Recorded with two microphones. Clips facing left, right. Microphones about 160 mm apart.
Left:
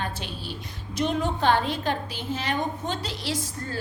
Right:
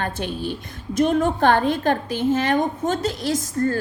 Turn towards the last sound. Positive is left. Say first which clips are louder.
# right 10 dB
turn(degrees=-50)  # may be behind; listen again after turning